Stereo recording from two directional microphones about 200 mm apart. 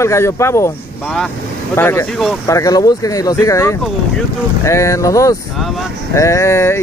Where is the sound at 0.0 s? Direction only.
15° left (ahead or behind).